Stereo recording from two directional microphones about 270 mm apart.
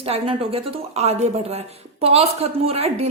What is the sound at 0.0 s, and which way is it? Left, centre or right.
A woman's voice, right.